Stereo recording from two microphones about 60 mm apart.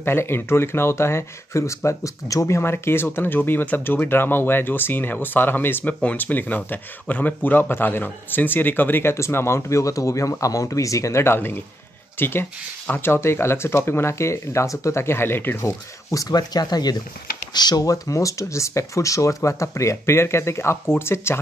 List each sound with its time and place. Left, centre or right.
0.0 s speech: left
1.9 s speech: left
9.1 s speech: left
11.2 s speech: left
15.6 s speech: left